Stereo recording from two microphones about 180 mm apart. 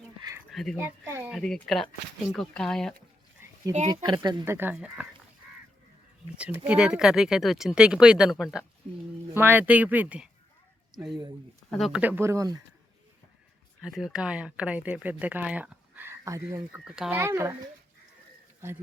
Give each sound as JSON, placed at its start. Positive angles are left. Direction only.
{"t": 0.5, "sound": "speech", "side_deg": 0}
{"t": 0.8, "sound": "speech", "side_deg": -15}
{"t": 1.3, "sound": "speech", "side_deg": 5}
{"t": 3.4, "sound": "oink", "side_deg": -10}
{"t": 4.0, "sound": "speech", "side_deg": -25}
{"t": 4.4, "sound": "speech", "side_deg": -10}
{"t": 6.3, "sound": "speech", "side_deg": -5}
{"t": 9.3, "sound": "speech", "side_deg": -10}
{"t": 13.8, "sound": "speech", "side_deg": 0}
{"t": 16.8, "sound": "speech", "side_deg": -5}
{"t": 17.2, "sound": "speech", "side_deg": -15}